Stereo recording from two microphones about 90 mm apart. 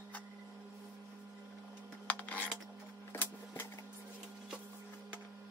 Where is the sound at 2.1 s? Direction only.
15° left (ahead or behind).